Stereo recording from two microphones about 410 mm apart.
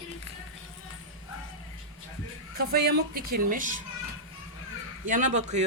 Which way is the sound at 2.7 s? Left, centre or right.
Right.